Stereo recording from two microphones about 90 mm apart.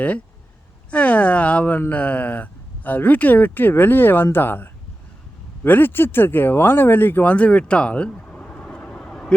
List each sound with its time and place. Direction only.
0.9 s speech: 15° left (ahead or behind)